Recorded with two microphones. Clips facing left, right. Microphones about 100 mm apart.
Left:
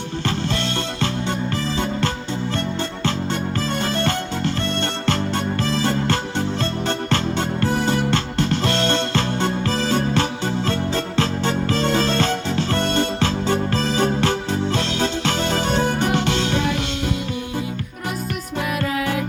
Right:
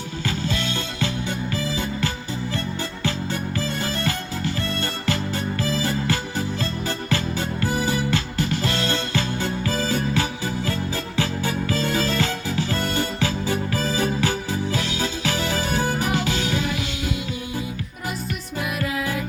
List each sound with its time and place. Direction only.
1.0 s music: 65° left (ahead or behind)
3.8 s music: 65° left (ahead or behind)